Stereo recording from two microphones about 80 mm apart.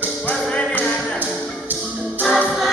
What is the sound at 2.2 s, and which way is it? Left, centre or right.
Music, centre.